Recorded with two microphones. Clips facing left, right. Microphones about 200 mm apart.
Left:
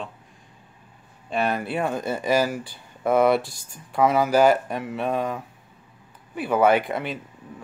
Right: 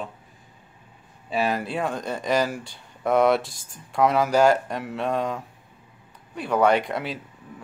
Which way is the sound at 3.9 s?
Centre (ahead or behind).